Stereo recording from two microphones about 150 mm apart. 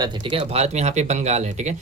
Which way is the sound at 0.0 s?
35° right (ahead or behind).